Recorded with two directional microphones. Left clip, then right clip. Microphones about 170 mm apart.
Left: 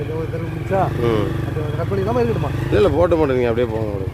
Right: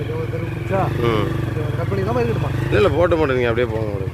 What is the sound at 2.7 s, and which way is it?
Speech, 40° left (ahead or behind).